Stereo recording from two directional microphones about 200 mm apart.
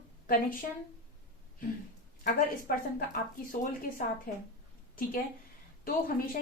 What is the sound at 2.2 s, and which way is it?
A woman's voice, 45° left (ahead or behind).